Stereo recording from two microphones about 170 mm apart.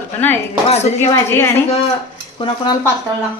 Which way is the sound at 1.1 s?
15° left (ahead or behind).